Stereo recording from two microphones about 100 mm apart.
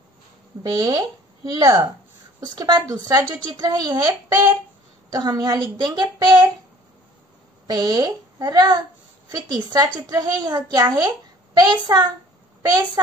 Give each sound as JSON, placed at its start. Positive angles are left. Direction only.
{"t": 0.7, "sound": "a woman's voice", "side_deg": -40}
{"t": 7.6, "sound": "a woman's voice", "side_deg": -40}